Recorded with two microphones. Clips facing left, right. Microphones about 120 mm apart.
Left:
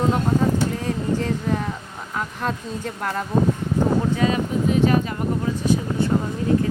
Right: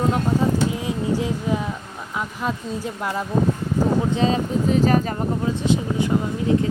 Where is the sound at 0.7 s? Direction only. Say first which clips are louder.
Even; 10° right (ahead or behind).